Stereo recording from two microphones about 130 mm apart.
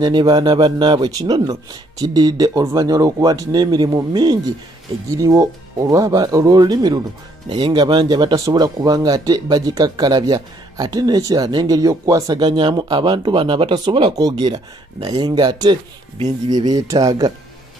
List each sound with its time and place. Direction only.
0.0 s speech: 35° right (ahead or behind)